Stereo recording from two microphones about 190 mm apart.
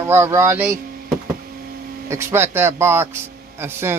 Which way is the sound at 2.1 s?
15° right (ahead or behind).